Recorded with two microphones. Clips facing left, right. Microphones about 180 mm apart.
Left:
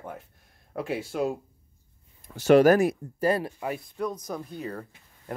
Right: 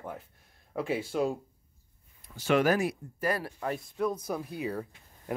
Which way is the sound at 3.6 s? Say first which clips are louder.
Even; 5° left (ahead or behind).